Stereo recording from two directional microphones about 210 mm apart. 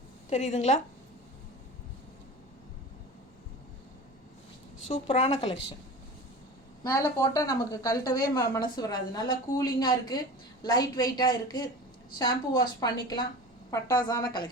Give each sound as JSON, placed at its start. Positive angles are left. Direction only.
{"t": 0.3, "sound": "speech", "side_deg": 30}
{"t": 4.9, "sound": "speech", "side_deg": 30}
{"t": 6.8, "sound": "a woman's voice", "side_deg": 15}